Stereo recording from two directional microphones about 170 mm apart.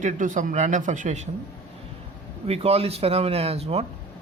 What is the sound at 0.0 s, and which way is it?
Speech, 50° right (ahead or behind).